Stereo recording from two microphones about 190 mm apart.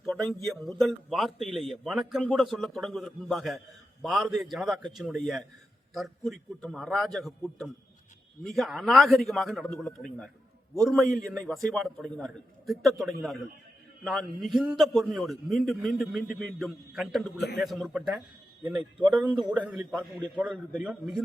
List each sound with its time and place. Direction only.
0.0 s a sound: centre (ahead or behind)
0.4 s a man's voice: centre (ahead or behind)
18.6 s a man's voice: 20° right (ahead or behind)
19.4 s a man's voice: 5° right (ahead or behind)